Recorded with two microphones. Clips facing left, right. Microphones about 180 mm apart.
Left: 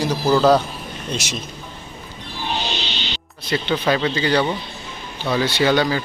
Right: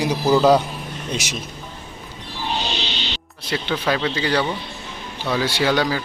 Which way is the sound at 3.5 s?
Centre (ahead or behind).